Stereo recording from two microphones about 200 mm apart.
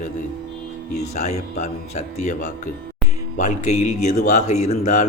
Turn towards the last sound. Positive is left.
turn(degrees=35)  # may be behind; listen again after turning